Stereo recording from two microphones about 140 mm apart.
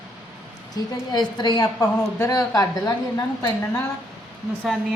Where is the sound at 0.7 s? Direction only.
30° left (ahead or behind).